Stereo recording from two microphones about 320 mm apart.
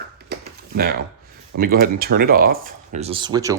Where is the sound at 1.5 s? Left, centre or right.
Right.